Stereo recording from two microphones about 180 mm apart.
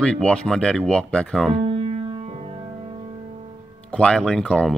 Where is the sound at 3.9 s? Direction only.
5° left (ahead or behind).